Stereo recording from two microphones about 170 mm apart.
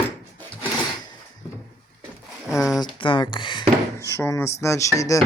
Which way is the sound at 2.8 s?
30° left (ahead or behind).